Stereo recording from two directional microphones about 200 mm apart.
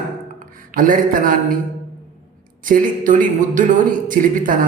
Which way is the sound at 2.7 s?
40° right (ahead or behind).